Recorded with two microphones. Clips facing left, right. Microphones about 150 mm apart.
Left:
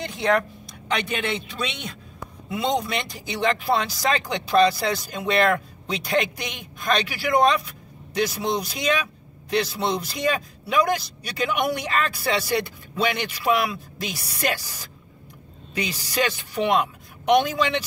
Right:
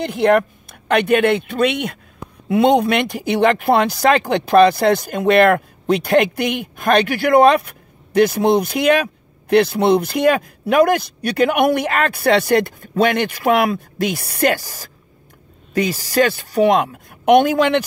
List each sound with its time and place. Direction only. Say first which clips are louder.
0.0 s speech: right 8 dB; 60° right (ahead or behind)